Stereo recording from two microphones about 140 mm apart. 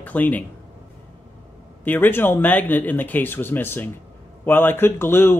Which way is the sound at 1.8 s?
15° left (ahead or behind).